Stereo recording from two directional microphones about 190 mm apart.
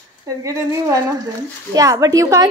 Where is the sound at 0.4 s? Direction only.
15° right (ahead or behind).